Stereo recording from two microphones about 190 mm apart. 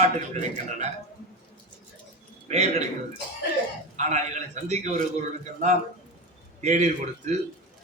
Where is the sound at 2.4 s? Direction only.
35° right (ahead or behind).